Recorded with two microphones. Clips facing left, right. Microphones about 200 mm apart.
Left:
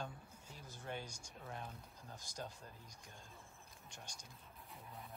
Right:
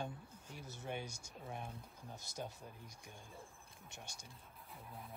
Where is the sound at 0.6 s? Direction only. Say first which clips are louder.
Right 5 dB; 75° right (ahead or behind).